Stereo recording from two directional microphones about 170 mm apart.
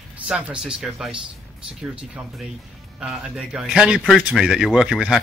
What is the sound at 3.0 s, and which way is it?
A man's voice, 5° right (ahead or behind).